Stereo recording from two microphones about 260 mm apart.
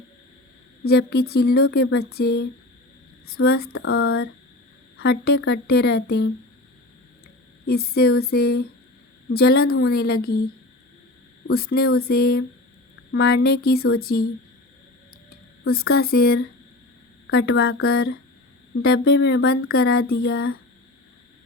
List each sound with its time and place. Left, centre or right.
0.9 s speech: left
3.7 s a sound: left
5.0 s speech: left
7.7 s speech: left
11.5 s speech: left
15.7 s speech: left
17.8 s speech: left